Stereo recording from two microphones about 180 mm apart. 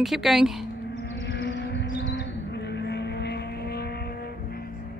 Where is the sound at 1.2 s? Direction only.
70° left (ahead or behind).